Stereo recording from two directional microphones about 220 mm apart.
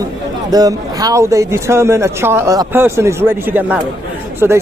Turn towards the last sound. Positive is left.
turn(degrees=-10)  # may be behind; listen again after turning